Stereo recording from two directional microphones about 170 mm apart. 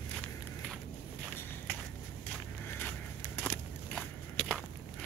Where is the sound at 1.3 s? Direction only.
10° left (ahead or behind).